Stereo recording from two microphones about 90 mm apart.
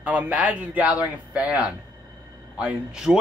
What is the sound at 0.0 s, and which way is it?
Speech, 15° right (ahead or behind).